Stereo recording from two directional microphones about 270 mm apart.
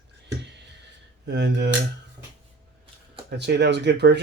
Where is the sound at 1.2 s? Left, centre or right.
Right.